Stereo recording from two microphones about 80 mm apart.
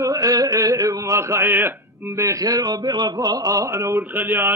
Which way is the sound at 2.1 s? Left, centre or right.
Right.